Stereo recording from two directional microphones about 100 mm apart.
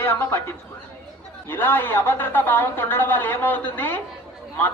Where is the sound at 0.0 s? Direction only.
25° left (ahead or behind).